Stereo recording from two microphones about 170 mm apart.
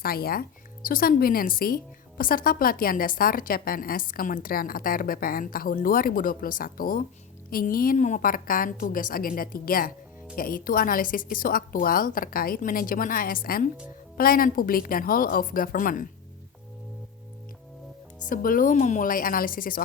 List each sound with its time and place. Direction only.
0.0 s a woman's voice: 60° left (ahead or behind)
18.3 s a woman's voice: 50° left (ahead or behind)